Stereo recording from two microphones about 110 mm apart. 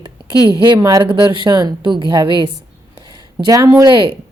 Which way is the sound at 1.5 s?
45° right (ahead or behind).